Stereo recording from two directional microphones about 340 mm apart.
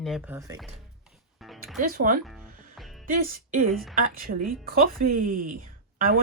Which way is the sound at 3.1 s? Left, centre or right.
Right.